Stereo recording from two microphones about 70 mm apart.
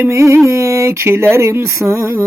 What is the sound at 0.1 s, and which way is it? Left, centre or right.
Speech, right.